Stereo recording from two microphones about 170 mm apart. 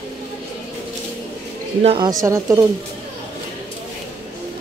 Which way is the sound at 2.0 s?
20° right (ahead or behind).